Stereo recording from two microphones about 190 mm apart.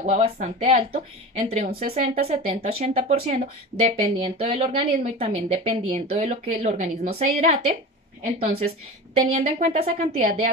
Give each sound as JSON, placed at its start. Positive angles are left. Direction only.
{"t": 0.0, "sound": "a woman's voice", "side_deg": -35}
{"t": 1.7, "sound": "speech", "side_deg": -50}
{"t": 2.0, "sound": "a woman's voice", "side_deg": -30}